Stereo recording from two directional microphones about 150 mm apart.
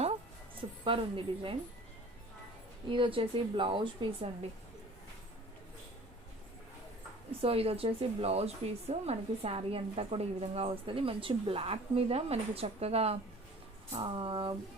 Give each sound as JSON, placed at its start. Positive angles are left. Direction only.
{"t": 0.9, "sound": "speech", "side_deg": -35}
{"t": 2.9, "sound": "speech", "side_deg": -35}
{"t": 7.4, "sound": "speech", "side_deg": -40}